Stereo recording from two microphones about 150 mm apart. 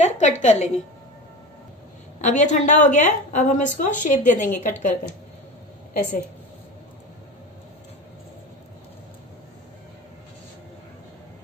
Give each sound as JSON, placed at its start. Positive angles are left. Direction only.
{"t": 0.0, "sound": "a woman's voice", "side_deg": 55}
{"t": 2.2, "sound": "a woman's voice", "side_deg": 55}